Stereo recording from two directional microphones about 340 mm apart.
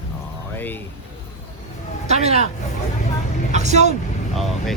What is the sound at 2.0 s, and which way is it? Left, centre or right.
Speech, centre.